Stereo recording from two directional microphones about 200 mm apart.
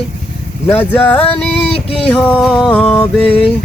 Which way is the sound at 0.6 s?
10° left (ahead or behind).